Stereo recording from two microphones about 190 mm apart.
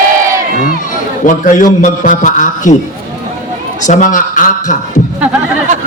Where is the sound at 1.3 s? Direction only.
45° left (ahead or behind).